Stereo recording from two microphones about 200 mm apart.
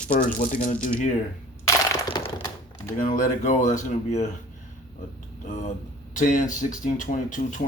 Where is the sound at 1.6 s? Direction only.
25° left (ahead or behind).